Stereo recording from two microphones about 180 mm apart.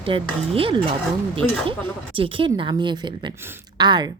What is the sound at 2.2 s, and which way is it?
Speech, 30° right (ahead or behind).